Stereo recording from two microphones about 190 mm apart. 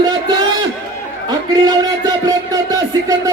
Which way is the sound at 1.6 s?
20° right (ahead or behind).